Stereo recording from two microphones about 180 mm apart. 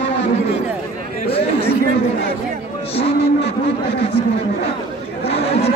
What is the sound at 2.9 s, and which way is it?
Speech, 35° left (ahead or behind).